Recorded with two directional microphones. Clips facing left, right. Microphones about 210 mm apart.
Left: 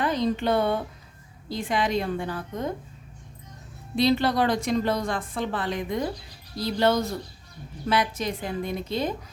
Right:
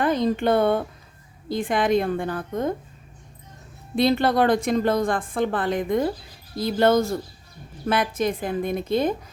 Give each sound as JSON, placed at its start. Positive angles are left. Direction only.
{"t": 0.0, "sound": "a woman's voice", "side_deg": -50}
{"t": 3.9, "sound": "a woman's voice", "side_deg": -55}